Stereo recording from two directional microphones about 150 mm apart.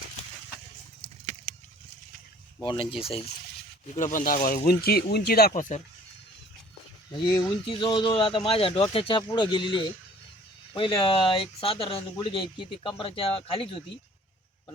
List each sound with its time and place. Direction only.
2.6 s speech: 35° left (ahead or behind)
3.9 s speech: 60° left (ahead or behind)
4.4 s speech: 75° left (ahead or behind); by 5.8 s 60° left (ahead or behind)
7.7 s speech: 35° left (ahead or behind)